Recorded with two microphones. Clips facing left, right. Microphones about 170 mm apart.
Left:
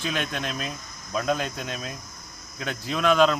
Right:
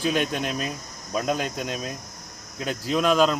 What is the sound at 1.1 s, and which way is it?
Speech, 10° right (ahead or behind).